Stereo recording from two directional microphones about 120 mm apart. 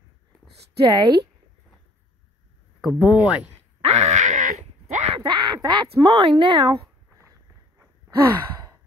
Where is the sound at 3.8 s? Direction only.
70° right (ahead or behind).